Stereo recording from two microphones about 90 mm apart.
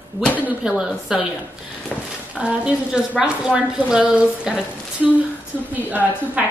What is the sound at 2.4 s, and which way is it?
A woman's voice, 10° right (ahead or behind).